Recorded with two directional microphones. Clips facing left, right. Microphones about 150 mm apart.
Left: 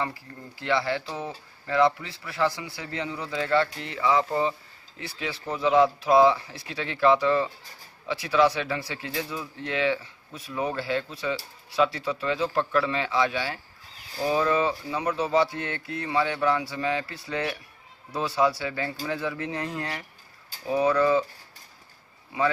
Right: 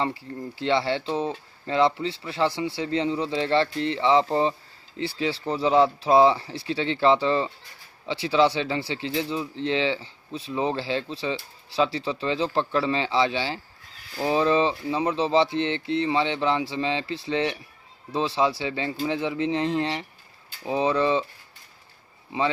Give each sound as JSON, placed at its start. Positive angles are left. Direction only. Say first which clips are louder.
{"t": 0.0, "sound": "speech", "louder": "right 4 dB", "side_deg": -25}